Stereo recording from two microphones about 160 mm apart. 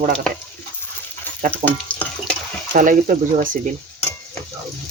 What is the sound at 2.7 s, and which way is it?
Speech, 55° right (ahead or behind).